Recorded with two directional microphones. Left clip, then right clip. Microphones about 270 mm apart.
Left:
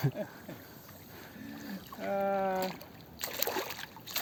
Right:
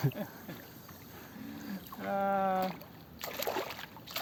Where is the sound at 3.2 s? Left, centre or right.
Left.